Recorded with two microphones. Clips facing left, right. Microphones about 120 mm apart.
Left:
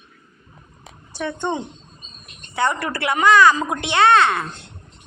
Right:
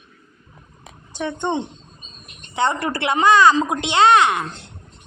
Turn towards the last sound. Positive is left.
turn(degrees=-15)  # may be behind; listen again after turning